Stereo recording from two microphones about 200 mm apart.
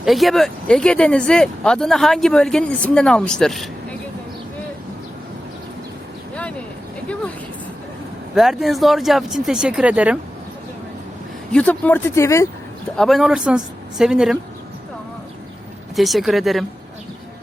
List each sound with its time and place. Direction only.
0.0 s speech: centre (ahead or behind)
8.4 s speech: centre (ahead or behind)
11.5 s speech: 5° left (ahead or behind)
13.0 s speech: centre (ahead or behind)
16.0 s speech: centre (ahead or behind)